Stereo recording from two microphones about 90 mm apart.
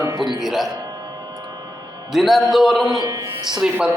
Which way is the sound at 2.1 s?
Centre (ahead or behind).